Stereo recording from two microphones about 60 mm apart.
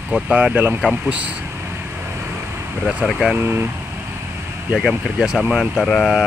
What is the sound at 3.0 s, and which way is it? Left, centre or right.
Speech, centre.